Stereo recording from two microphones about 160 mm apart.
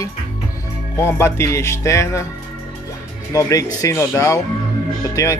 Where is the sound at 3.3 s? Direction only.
20° left (ahead or behind).